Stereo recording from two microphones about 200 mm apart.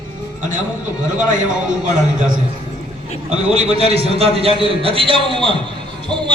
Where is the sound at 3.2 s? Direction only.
30° right (ahead or behind).